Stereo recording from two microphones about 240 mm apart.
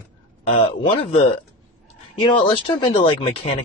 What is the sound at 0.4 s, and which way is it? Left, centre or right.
Speech, left.